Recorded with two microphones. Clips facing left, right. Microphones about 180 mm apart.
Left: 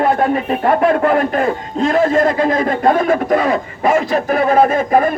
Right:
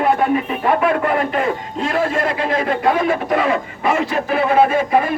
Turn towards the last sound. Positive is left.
turn(degrees=45)  # may be behind; listen again after turning